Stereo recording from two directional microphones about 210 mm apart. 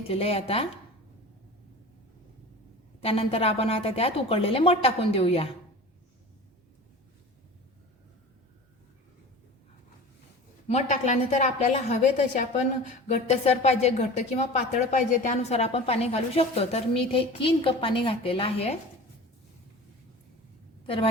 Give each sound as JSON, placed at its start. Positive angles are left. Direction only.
{"t": 0.1, "sound": "a woman's voice", "side_deg": 30}
{"t": 3.0, "sound": "a woman's voice", "side_deg": 30}
{"t": 10.7, "sound": "a woman's voice", "side_deg": 35}
{"t": 13.1, "sound": "a woman's voice", "side_deg": 30}
{"t": 20.8, "sound": "a woman's voice", "side_deg": 25}